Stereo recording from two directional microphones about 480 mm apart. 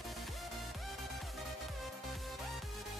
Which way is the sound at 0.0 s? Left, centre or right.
Centre.